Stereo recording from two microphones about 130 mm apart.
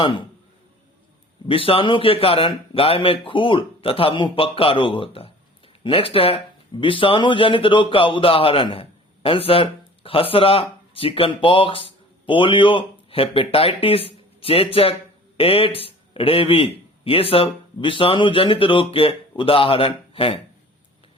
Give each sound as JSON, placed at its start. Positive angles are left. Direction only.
{"t": 1.5, "sound": "speech", "side_deg": 45}